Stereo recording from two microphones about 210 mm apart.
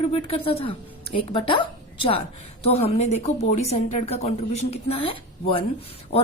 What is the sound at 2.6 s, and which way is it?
A woman's voice, 30° left (ahead or behind).